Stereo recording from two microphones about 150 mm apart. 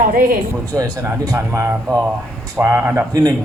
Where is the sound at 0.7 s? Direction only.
25° right (ahead or behind).